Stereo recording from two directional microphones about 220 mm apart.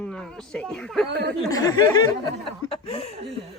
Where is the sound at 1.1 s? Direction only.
50° right (ahead or behind).